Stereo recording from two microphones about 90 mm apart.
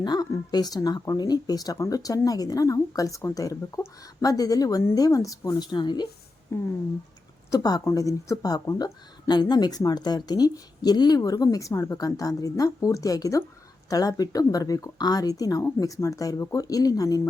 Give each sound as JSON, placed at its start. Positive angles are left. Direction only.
{"t": 0.0, "sound": "speech", "side_deg": 50}
{"t": 5.7, "sound": "speech", "side_deg": 55}
{"t": 6.5, "sound": "speech", "side_deg": 30}
{"t": 7.5, "sound": "speech", "side_deg": 45}